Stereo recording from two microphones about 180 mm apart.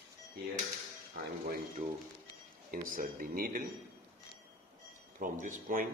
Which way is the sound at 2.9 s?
50° right (ahead or behind).